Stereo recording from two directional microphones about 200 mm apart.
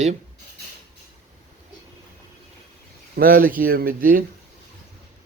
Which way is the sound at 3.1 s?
45° right (ahead or behind).